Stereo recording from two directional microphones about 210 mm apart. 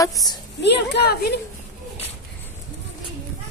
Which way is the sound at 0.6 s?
55° left (ahead or behind).